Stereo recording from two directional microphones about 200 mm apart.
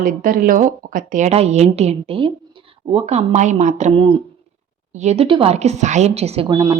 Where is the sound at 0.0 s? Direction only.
45° right (ahead or behind).